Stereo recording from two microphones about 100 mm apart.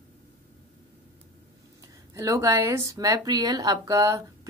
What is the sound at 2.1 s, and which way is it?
Speech, 35° right (ahead or behind).